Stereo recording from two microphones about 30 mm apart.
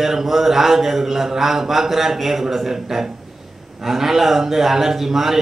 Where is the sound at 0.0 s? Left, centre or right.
Centre.